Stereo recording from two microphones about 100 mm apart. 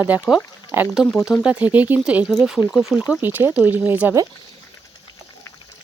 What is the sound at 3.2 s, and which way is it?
Speech, 20° right (ahead or behind).